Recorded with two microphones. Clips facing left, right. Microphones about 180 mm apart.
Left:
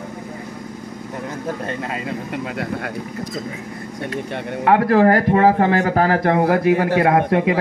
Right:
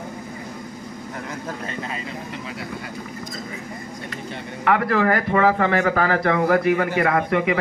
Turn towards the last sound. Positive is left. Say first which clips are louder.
# left 4 dB
turn(degrees=55)  # may be behind; listen again after turning